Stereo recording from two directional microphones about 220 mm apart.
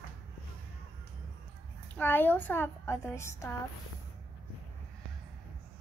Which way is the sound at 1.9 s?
10° left (ahead or behind).